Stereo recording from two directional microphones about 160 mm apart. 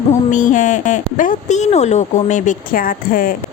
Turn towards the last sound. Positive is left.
turn(degrees=60)  # may be behind; listen again after turning